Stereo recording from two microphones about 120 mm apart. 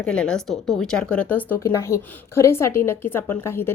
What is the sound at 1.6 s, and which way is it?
A woman's voice, 25° left (ahead or behind).